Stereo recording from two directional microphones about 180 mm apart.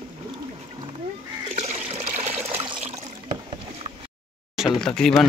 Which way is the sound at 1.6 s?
40° right (ahead or behind).